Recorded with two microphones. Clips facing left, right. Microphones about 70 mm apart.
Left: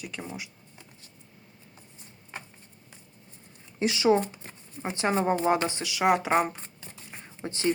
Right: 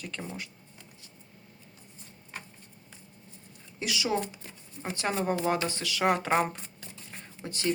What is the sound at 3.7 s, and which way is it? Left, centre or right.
Speech, left.